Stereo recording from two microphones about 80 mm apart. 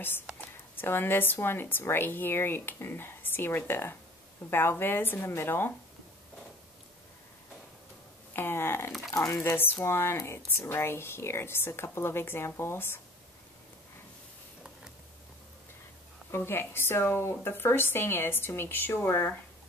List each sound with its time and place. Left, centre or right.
0.7 s speech: left
8.3 s speech: left
16.3 s speech: left